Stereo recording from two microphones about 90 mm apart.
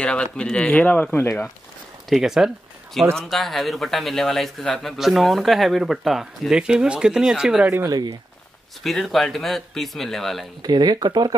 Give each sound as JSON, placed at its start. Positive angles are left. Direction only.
{"t": 0.0, "sound": "speech", "side_deg": 10}
{"t": 2.0, "sound": "speech", "side_deg": 0}
{"t": 7.9, "sound": "speech", "side_deg": -50}
{"t": 8.8, "sound": "speech", "side_deg": 0}
{"t": 10.6, "sound": "speech", "side_deg": -50}